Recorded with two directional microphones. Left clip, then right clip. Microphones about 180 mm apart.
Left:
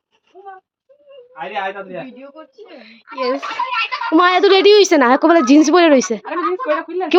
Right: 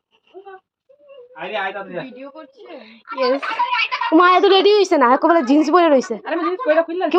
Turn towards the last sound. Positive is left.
turn(degrees=10)  # may be behind; listen again after turning